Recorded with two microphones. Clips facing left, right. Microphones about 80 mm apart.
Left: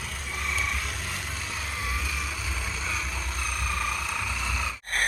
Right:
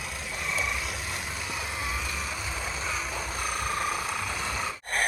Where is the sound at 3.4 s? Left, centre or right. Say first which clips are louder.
Right 1 dB; right.